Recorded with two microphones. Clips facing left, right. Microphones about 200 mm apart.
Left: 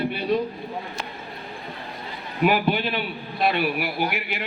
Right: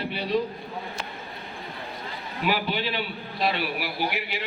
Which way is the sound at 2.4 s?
55° left (ahead or behind).